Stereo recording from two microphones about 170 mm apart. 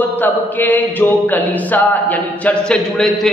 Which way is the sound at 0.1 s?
10° left (ahead or behind).